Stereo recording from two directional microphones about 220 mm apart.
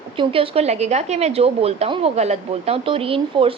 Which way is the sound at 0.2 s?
25° right (ahead or behind).